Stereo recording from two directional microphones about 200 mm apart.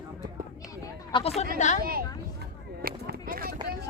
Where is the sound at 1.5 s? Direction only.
35° left (ahead or behind).